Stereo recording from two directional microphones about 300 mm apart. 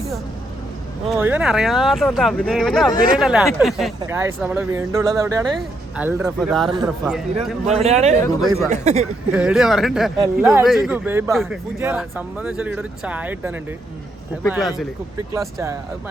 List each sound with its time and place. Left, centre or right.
1.1 s speech: centre
7.7 s speech: right
8.4 s speech: centre
8.7 s speech: right
9.3 s speech: centre